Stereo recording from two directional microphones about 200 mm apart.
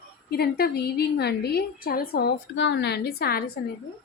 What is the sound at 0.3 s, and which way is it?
A woman's voice, 50° left (ahead or behind).